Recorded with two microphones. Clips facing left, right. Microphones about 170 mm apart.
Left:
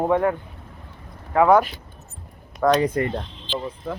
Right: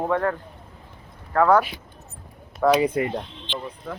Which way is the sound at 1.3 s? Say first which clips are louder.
Left 2 dB; 15° left (ahead or behind).